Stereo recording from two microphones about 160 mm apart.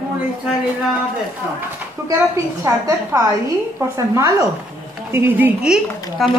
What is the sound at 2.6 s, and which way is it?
A woman's voice, 15° right (ahead or behind).